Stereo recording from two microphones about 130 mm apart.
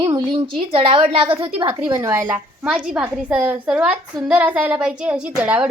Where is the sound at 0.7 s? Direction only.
45° right (ahead or behind).